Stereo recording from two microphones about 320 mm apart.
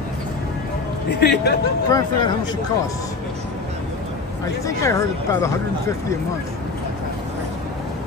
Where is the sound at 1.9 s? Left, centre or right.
Centre.